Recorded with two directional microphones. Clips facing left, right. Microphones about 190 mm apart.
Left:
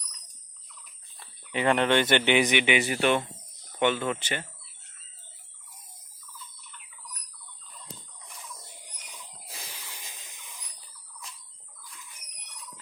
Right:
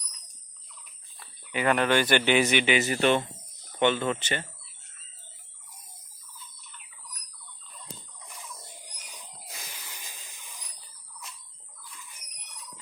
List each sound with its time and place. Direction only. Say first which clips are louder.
1.2 s speech: left 1 dB; 25° left (ahead or behind); by 4.4 s 10° left (ahead or behind)
9.5 s wheeze: left 1 dB; 25° left (ahead or behind)